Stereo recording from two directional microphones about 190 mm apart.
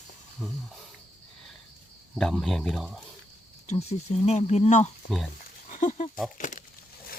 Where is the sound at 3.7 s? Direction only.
35° left (ahead or behind).